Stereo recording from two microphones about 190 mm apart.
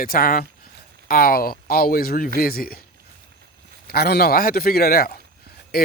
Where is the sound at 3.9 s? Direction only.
55° left (ahead or behind).